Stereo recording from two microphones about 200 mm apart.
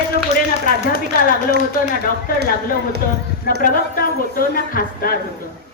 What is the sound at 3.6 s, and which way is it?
Speech, 45° left (ahead or behind).